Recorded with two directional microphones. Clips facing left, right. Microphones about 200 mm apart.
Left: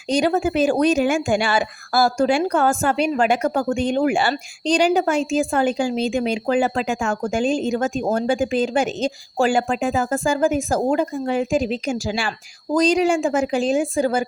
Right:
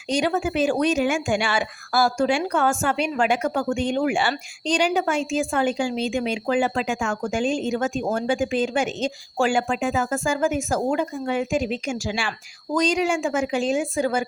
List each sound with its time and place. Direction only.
0.1 s speech: 35° left (ahead or behind)